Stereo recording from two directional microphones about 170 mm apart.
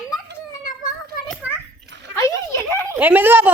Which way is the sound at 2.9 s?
10° right (ahead or behind).